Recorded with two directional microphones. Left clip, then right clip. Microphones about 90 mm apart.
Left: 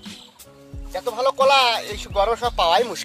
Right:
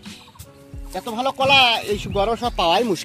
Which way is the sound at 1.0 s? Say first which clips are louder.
Left 3 dB; 45° left (ahead or behind).